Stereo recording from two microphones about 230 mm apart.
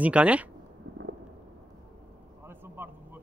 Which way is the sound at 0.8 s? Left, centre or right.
Right.